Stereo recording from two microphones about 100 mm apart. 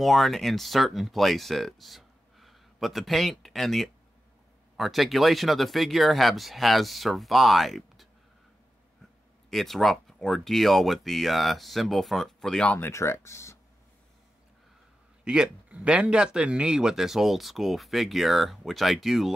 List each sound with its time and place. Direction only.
0.0 s speech: centre (ahead or behind)
9.5 s speech: centre (ahead or behind)
12.8 s speech: 25° left (ahead or behind)
15.2 s speech: 10° right (ahead or behind)